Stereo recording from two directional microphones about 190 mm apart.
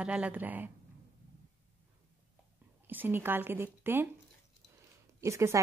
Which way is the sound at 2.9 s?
10° right (ahead or behind).